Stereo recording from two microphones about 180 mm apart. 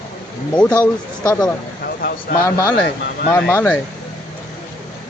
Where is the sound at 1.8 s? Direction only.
55° left (ahead or behind).